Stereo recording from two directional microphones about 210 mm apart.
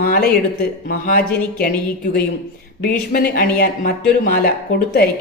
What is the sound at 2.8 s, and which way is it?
Speech, 45° left (ahead or behind).